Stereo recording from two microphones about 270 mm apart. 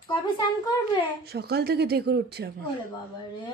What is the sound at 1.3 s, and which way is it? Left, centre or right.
Speech, right.